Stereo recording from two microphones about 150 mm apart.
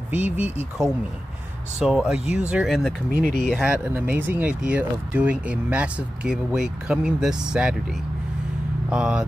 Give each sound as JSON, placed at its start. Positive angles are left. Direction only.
{"t": 0.1, "sound": "speech", "side_deg": -10}
{"t": 1.8, "sound": "speech", "side_deg": -5}
{"t": 3.1, "sound": "speech", "side_deg": -65}
{"t": 3.5, "sound": "speech", "side_deg": -10}
{"t": 8.9, "sound": "speech", "side_deg": -5}